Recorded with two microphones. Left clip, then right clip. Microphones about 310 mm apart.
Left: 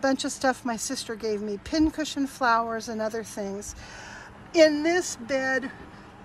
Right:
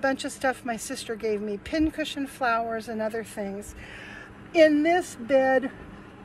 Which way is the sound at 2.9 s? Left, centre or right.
Left.